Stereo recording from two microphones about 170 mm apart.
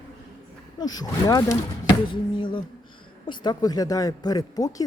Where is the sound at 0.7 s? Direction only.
25° left (ahead or behind).